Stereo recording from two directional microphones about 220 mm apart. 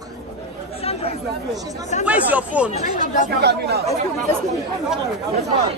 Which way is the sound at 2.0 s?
5° right (ahead or behind).